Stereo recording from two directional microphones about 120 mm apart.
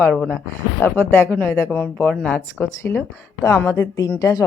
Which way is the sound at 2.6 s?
20° left (ahead or behind).